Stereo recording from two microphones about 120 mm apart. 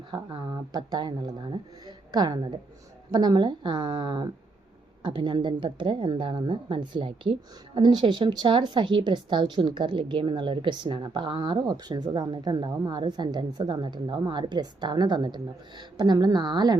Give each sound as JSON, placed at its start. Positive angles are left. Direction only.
{"t": 0.1, "sound": "speech", "side_deg": -40}